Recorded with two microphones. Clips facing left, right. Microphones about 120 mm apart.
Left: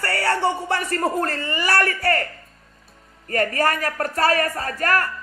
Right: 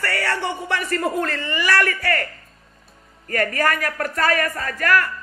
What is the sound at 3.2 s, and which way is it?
A woman's voice, 35° left (ahead or behind).